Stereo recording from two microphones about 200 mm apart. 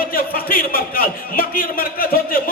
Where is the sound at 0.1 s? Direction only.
45° left (ahead or behind).